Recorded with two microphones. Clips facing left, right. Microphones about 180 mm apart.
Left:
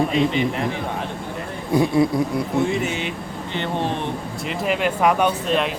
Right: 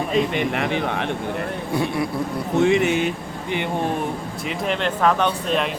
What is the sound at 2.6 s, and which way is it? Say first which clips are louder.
Speech: right 5 dB; 65° right (ahead or behind).